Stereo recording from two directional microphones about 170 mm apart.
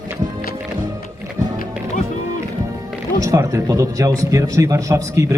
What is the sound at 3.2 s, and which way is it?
A man's voice, 20° right (ahead or behind).